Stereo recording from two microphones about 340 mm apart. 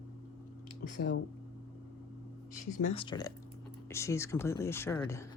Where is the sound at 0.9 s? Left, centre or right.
Left.